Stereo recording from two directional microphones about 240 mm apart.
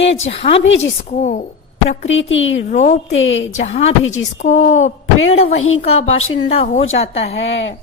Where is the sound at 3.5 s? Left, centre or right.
Left.